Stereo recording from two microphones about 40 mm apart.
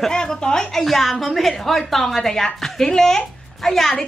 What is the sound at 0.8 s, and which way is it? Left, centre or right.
A woman's voice, centre.